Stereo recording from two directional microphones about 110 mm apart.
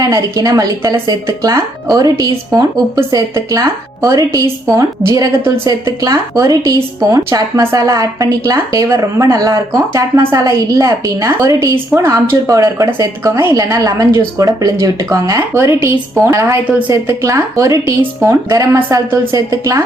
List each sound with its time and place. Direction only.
0.0 s a woman's voice: 35° right (ahead or behind)